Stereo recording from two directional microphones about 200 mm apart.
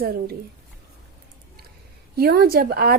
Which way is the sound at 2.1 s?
50° right (ahead or behind).